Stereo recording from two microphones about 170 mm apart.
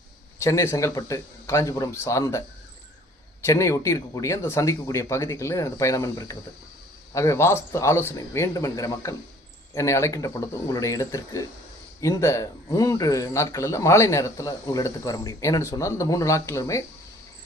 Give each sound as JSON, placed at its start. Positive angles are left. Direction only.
{"t": 0.4, "sound": "speech", "side_deg": 15}
{"t": 3.4, "sound": "speech", "side_deg": 15}